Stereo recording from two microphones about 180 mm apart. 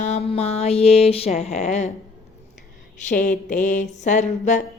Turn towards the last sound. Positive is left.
turn(degrees=40)  # may be behind; listen again after turning